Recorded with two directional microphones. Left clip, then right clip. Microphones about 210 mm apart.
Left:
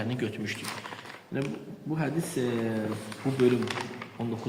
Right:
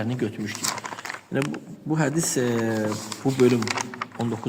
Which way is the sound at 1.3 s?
45° right (ahead or behind).